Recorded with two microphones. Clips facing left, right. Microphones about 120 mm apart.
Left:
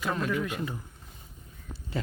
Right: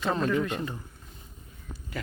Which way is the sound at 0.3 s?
5° left (ahead or behind).